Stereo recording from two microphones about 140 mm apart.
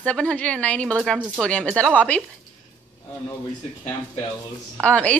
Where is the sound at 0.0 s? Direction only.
5° left (ahead or behind).